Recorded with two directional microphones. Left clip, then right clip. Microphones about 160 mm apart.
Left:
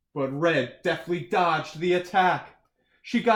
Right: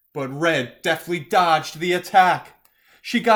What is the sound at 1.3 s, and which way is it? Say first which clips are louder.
Speech: right 7 dB; 30° right (ahead or behind).